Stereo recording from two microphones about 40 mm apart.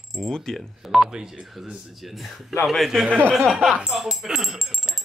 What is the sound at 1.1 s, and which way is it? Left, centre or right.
Speech, centre.